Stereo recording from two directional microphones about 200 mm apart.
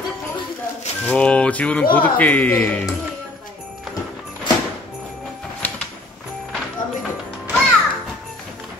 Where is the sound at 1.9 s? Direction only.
10° left (ahead or behind).